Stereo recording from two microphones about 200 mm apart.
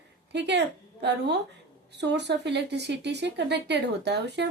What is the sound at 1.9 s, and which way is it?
Speech, 60° right (ahead or behind).